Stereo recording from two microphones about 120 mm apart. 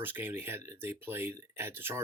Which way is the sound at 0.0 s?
15° right (ahead or behind).